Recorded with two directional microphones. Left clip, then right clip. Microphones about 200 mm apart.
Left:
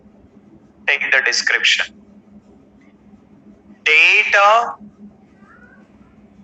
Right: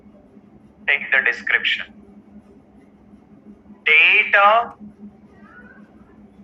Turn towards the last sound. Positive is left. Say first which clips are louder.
# left 2 dB
turn(degrees=45)  # may be behind; listen again after turning